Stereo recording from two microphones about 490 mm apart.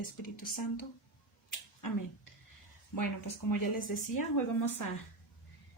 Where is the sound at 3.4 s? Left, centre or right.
Left.